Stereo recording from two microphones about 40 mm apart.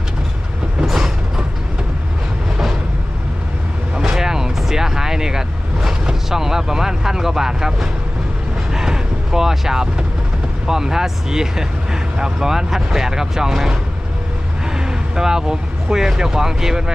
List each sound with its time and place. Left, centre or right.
0.9 s vehicle: centre
4.0 s vehicle: centre
8.7 s a sound: centre
10.7 s speech: centre
14.7 s speech: centre